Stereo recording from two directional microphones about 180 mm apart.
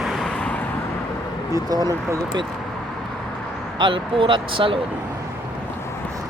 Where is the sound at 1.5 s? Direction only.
20° right (ahead or behind).